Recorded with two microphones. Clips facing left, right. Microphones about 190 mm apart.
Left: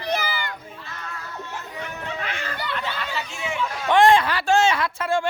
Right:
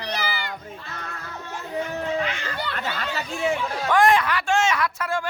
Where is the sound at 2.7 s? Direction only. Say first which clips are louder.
Even; 45° right (ahead or behind).